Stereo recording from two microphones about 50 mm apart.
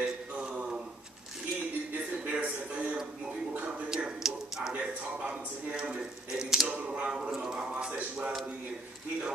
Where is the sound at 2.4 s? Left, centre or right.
Right.